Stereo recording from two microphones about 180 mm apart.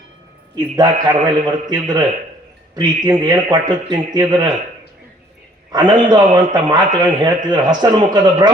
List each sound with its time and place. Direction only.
0.5 s a man's voice: 25° right (ahead or behind)
5.7 s a man's voice: 25° right (ahead or behind)